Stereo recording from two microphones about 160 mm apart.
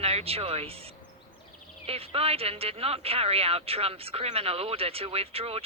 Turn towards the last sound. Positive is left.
turn(degrees=-40)  # may be behind; listen again after turning